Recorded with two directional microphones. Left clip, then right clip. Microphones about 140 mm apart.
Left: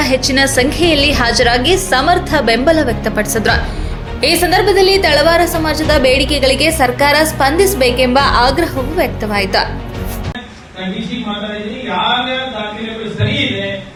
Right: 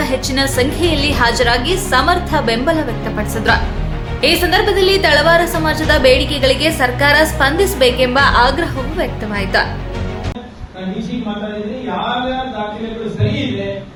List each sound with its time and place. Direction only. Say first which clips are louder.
0.0 s a woman's voice: left 4 dB; 20° left (ahead or behind)